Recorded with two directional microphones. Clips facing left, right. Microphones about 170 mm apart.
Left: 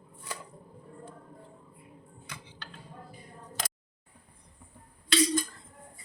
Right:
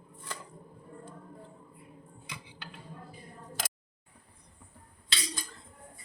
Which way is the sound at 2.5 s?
15° right (ahead or behind).